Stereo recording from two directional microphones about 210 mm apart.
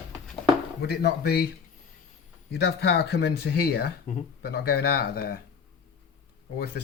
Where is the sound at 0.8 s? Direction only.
50° left (ahead or behind).